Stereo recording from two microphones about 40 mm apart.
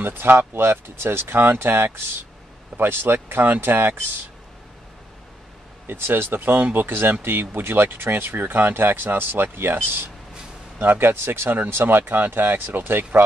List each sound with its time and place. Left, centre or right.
0.0 s speech: right
5.9 s speech: right
6.9 s speech: right
11.0 s speech: right
11.7 s speech: right